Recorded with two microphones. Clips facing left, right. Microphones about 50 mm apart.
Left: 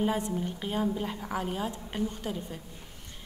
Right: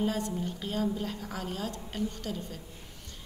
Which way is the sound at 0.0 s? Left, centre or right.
Left.